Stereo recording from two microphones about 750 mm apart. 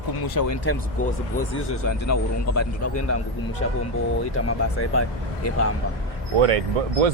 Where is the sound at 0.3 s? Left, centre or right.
Left.